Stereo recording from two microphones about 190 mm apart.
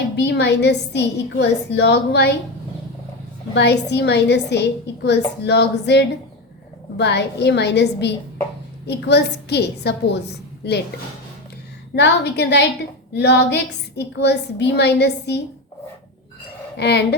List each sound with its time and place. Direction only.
0.2 s a woman's voice: 65° left (ahead or behind)
3.5 s a woman's voice: 60° left (ahead or behind)
11.9 s a woman's voice: 65° left (ahead or behind)
16.7 s a woman's voice: 60° left (ahead or behind)